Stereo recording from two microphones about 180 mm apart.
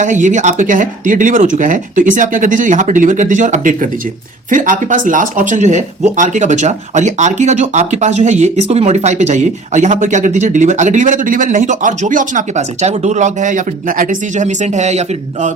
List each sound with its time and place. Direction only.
0.0 s speech: 45° right (ahead or behind)